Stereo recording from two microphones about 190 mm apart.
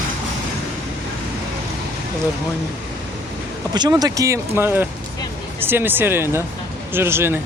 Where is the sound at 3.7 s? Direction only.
20° right (ahead or behind).